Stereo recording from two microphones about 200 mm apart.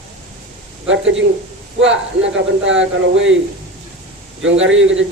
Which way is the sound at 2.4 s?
65° right (ahead or behind).